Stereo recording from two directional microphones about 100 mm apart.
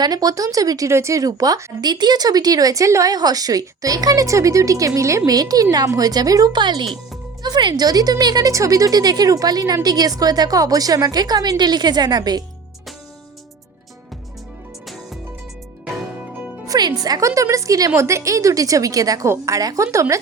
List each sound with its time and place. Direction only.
0.0 s speech: 40° right (ahead or behind)
16.6 s speech: 40° right (ahead or behind)